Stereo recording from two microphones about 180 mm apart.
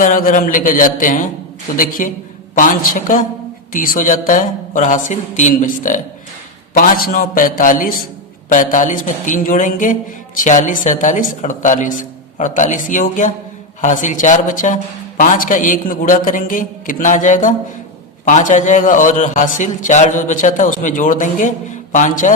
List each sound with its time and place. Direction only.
0.0 s speech: 50° left (ahead or behind)